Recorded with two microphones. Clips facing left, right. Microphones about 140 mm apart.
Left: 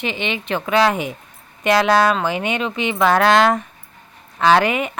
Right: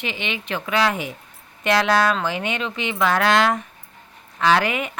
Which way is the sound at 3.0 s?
35° left (ahead or behind).